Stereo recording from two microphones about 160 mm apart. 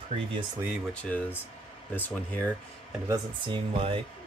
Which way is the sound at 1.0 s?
10° left (ahead or behind).